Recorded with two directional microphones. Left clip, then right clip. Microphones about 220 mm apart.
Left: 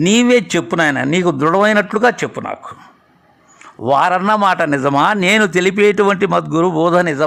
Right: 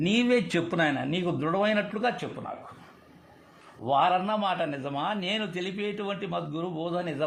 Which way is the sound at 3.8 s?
40° left (ahead or behind).